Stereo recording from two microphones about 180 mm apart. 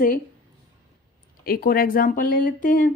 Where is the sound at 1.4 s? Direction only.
55° left (ahead or behind).